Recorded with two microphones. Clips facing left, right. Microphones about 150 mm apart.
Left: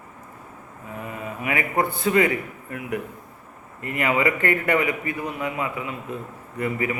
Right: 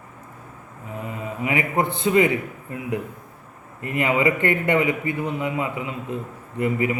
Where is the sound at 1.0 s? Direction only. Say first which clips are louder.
Right 2 dB; 25° right (ahead or behind).